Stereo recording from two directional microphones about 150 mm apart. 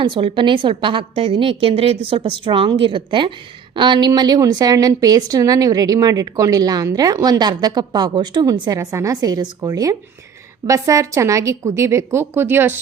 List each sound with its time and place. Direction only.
0.0 s a woman's voice: 35° right (ahead or behind); by 12.8 s 15° right (ahead or behind)